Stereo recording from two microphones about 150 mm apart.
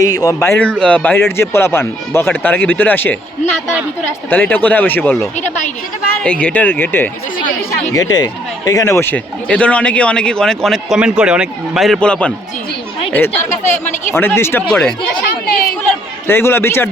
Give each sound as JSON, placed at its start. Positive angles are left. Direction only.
{"t": 0.0, "sound": "speech", "side_deg": 25}
{"t": 4.3, "sound": "speech", "side_deg": 10}
{"t": 7.9, "sound": "a man's voice", "side_deg": 25}
{"t": 16.2, "sound": "speech", "side_deg": 15}